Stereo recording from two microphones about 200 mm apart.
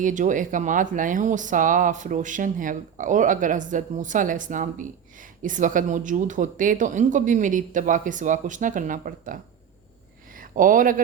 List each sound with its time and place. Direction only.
0.0 s speech: 40° right (ahead or behind)
10.5 s speech: 40° right (ahead or behind)